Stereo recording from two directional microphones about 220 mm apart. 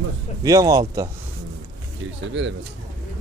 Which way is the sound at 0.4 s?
15° right (ahead or behind).